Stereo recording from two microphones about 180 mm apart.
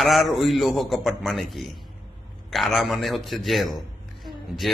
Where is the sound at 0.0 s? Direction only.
Centre (ahead or behind).